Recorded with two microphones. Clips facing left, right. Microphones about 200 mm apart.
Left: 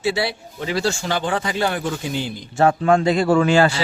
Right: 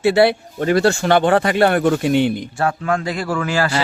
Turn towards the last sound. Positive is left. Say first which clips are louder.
# left 5 dB
turn(degrees=25)  # may be behind; listen again after turning